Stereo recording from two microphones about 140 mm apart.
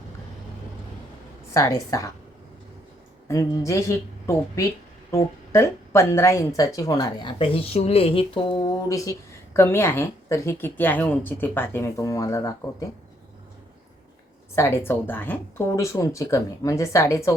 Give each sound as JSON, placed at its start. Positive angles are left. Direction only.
{"t": 1.5, "sound": "speech", "side_deg": 25}
{"t": 3.2, "sound": "speech", "side_deg": 20}
{"t": 14.5, "sound": "speech", "side_deg": 20}